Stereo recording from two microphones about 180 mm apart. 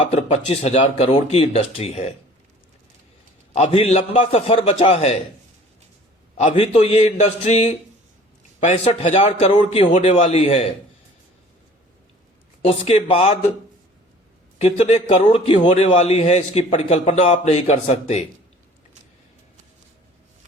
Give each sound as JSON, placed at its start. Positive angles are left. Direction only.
{"t": 0.1, "sound": "a man's voice", "side_deg": 35}
{"t": 3.5, "sound": "a man's voice", "side_deg": 35}
{"t": 6.3, "sound": "a man's voice", "side_deg": 35}
{"t": 12.6, "sound": "a man's voice", "side_deg": 30}
{"t": 14.6, "sound": "a man's voice", "side_deg": 35}